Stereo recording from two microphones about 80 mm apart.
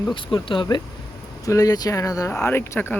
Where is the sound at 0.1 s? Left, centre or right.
Left.